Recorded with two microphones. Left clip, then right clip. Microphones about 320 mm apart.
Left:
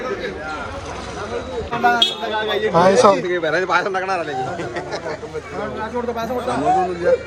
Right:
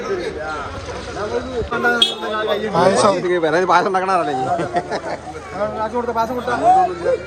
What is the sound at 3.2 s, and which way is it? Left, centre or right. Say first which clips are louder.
A man's voice: right 3 dB; right.